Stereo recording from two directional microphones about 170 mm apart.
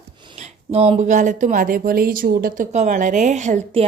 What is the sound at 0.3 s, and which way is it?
Speech, 35° right (ahead or behind).